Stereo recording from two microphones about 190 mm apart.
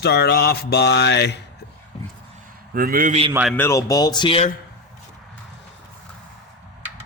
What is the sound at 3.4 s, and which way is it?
Speech, 10° left (ahead or behind).